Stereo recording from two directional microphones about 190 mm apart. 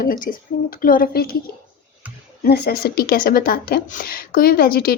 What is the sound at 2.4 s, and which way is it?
Speech, 55° left (ahead or behind).